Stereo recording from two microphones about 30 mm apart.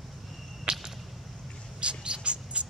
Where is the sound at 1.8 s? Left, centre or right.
Right.